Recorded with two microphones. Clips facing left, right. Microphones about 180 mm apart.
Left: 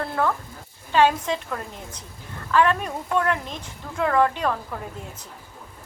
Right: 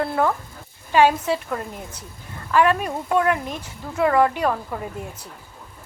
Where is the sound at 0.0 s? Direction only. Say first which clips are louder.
Right 3 dB; 15° right (ahead or behind).